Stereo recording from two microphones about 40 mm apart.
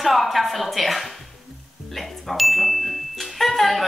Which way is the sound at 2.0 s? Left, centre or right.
Centre.